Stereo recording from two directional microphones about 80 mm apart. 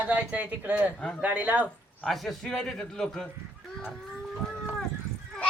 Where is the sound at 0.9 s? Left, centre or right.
Centre.